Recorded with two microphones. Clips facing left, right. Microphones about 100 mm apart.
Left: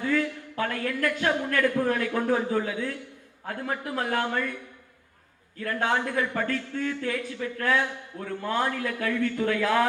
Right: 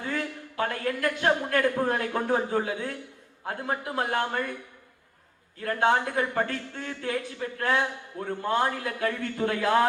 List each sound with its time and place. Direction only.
0.0 s a man's voice: 35° right (ahead or behind)
5.5 s a man's voice: 35° right (ahead or behind)